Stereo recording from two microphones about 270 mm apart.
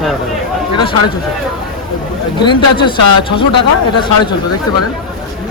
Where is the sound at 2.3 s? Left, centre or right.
Centre.